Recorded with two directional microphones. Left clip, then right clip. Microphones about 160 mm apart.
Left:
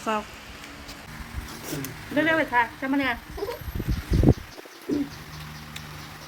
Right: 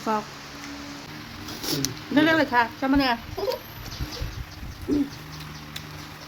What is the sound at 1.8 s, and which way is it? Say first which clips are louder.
Speech: right 2 dB; 25° right (ahead or behind).